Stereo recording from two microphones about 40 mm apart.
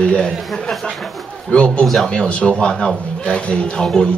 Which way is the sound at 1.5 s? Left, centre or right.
Left.